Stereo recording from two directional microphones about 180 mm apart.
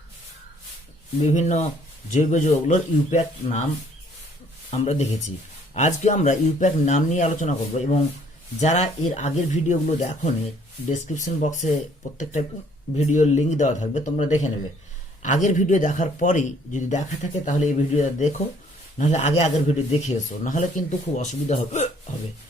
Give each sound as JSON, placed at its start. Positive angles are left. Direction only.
{"t": 1.2, "sound": "speech", "side_deg": 40}
{"t": 4.7, "sound": "speech", "side_deg": 35}